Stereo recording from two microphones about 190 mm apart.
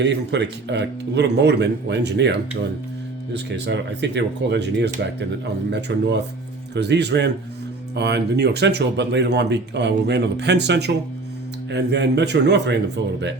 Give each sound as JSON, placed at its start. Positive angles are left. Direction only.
{"t": 0.0, "sound": "speech", "side_deg": -65}
{"t": 3.3, "sound": "speech", "side_deg": -65}